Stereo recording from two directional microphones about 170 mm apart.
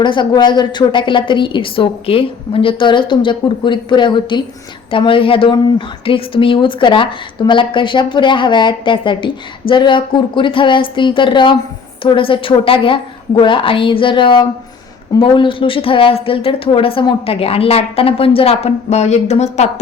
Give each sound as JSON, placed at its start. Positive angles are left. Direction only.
{"t": 0.0, "sound": "a woman's voice", "side_deg": 25}